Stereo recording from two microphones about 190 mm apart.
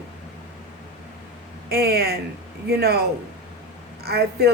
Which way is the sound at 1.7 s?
55° right (ahead or behind).